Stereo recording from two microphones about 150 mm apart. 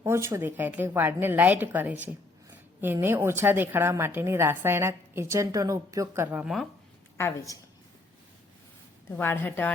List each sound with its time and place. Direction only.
0.0 s a woman's voice: 15° right (ahead or behind)
7.2 s a woman's voice: 20° left (ahead or behind)
9.0 s a woman's voice: 15° left (ahead or behind)